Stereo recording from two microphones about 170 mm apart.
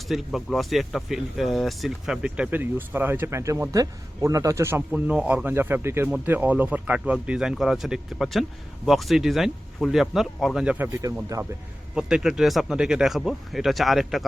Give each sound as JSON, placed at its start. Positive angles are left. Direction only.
{"t": 0.1, "sound": "speech", "side_deg": 0}
{"t": 11.0, "sound": "speech", "side_deg": -20}
{"t": 11.9, "sound": "speech", "side_deg": -5}